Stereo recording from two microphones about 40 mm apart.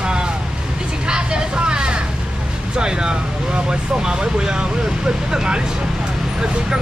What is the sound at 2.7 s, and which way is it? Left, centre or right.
Speech, centre.